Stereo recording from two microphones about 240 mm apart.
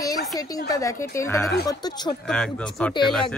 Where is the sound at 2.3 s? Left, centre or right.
Centre.